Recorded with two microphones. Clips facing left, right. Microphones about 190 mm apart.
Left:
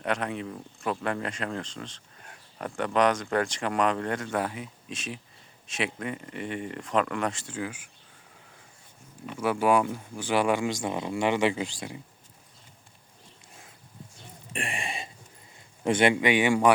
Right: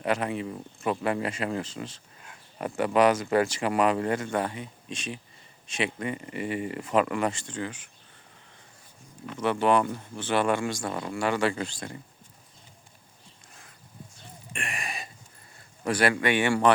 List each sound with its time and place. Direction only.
0.0 s speech: 5° right (ahead or behind)
9.2 s speech: 10° left (ahead or behind)
14.5 s throat clearing: 30° left (ahead or behind)
15.8 s speech: 25° left (ahead or behind)
16.1 s speech: 15° left (ahead or behind)